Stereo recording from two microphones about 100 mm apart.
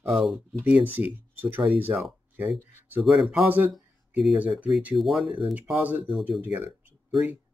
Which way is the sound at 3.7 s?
Centre (ahead or behind).